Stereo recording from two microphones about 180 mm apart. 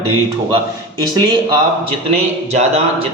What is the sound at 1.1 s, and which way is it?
Speech, 25° right (ahead or behind).